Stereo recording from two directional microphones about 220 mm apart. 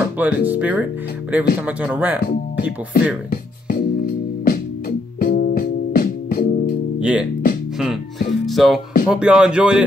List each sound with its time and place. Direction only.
0.0 s speech: 10° right (ahead or behind)
2.2 s speech: 45° left (ahead or behind)
3.3 s music: 40° left (ahead or behind)
7.0 s music: 5° right (ahead or behind)
8.5 s speech: centre (ahead or behind)